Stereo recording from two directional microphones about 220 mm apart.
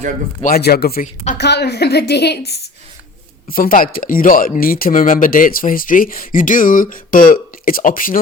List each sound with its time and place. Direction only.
0.4 s a woman's voice: 45° left (ahead or behind)